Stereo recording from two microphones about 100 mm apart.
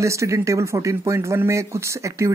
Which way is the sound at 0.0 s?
30° right (ahead or behind).